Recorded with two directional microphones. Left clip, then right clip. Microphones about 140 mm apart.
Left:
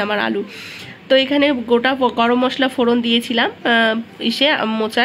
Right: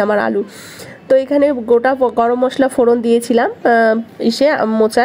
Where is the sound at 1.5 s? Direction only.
15° right (ahead or behind).